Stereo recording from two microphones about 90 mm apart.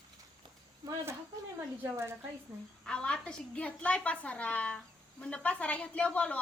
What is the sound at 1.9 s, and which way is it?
Speech, 30° right (ahead or behind).